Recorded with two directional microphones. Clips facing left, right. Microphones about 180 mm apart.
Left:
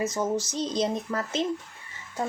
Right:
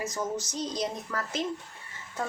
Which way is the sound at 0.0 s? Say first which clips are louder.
Left 5 dB; 25° left (ahead or behind).